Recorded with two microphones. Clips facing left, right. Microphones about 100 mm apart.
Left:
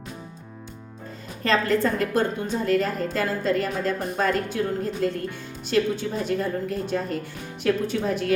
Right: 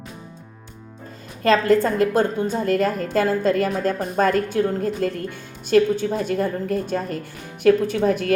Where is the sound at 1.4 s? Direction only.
45° right (ahead or behind).